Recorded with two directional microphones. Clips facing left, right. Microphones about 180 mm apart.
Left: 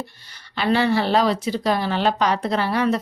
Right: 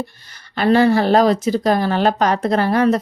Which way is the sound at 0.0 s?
45° right (ahead or behind).